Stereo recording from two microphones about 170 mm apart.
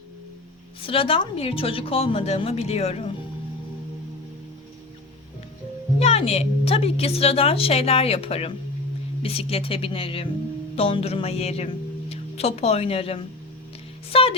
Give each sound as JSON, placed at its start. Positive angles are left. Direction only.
{"t": 0.9, "sound": "a woman's voice", "side_deg": 30}
{"t": 6.0, "sound": "a woman's voice", "side_deg": 35}